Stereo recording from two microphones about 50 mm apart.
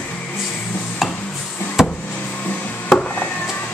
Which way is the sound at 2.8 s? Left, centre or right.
Left.